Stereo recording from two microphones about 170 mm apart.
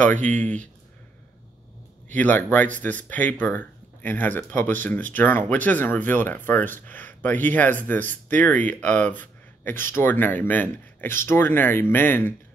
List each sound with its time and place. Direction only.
0.0 s speech: 10° left (ahead or behind)
2.1 s speech: 10° left (ahead or behind)